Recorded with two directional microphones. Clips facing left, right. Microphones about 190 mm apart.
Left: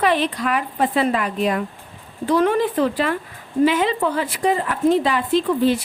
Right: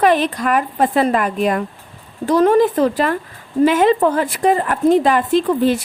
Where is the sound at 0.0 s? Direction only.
45° right (ahead or behind).